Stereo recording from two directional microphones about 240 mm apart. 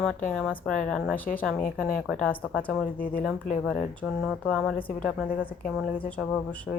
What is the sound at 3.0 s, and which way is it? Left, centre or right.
Speech, left.